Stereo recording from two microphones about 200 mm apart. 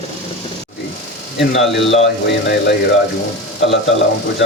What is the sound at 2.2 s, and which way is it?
Speech, 60° left (ahead or behind).